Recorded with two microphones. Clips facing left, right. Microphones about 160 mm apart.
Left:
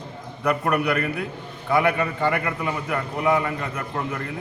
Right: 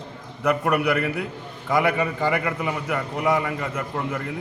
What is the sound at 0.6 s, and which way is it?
A man's voice, 10° right (ahead or behind).